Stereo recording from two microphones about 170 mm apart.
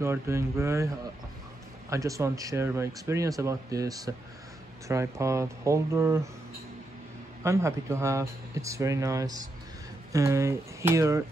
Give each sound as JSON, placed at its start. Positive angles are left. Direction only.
{"t": 0.0, "sound": "speech", "side_deg": -15}
{"t": 7.4, "sound": "speech", "side_deg": -15}